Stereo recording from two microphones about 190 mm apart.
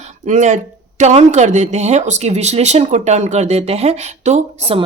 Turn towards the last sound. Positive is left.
turn(degrees=-30)  # may be behind; listen again after turning